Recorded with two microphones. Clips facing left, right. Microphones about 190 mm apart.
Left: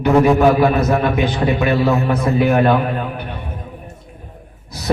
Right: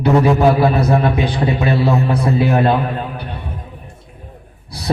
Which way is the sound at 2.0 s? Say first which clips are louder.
Even; 35° right (ahead or behind).